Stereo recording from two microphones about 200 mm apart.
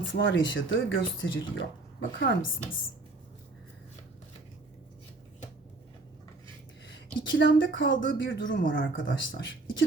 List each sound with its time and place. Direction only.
0.1 s speech: 65° left (ahead or behind)
6.8 s speech: 65° left (ahead or behind)